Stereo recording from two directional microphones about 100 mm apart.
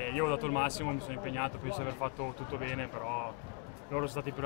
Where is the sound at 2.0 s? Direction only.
20° left (ahead or behind).